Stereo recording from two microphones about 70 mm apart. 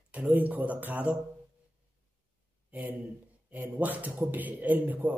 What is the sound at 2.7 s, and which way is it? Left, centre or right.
Speech, right.